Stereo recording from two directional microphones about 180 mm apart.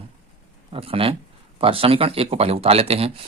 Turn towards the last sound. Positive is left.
turn(degrees=-35)  # may be behind; listen again after turning